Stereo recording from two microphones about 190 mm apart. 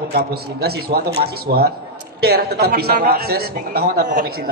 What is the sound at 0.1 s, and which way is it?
A man's voice, 55° right (ahead or behind).